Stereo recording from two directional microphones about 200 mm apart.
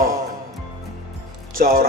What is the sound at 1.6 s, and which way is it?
Speech, 45° right (ahead or behind).